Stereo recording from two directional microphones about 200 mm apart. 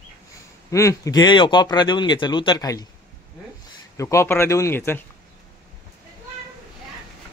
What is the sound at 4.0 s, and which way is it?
Speech, 15° left (ahead or behind).